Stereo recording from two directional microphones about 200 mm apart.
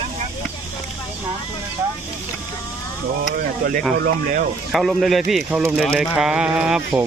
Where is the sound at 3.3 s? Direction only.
45° right (ahead or behind).